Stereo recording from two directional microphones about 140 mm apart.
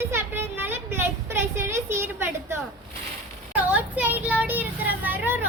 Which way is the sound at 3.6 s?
10° right (ahead or behind).